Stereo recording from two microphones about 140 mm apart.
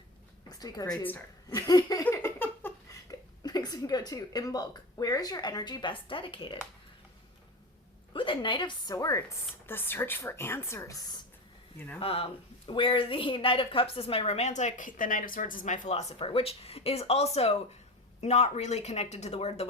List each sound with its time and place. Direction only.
0.4 s a woman's voice: 30° left (ahead or behind)
1.5 s a sound: 25° left (ahead or behind)
2.0 s speech: 15° left (ahead or behind); by 6.6 s 35° left (ahead or behind)
8.1 s a woman's voice: 35° left (ahead or behind); by 10.9 s 20° left (ahead or behind)
11.9 s speech: 40° left (ahead or behind)